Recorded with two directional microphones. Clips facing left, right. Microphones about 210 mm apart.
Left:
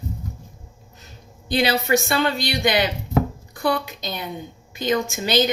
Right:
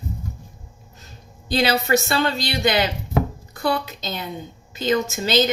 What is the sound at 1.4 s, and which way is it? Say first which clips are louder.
A woman's voice: even; 20° left (ahead or behind).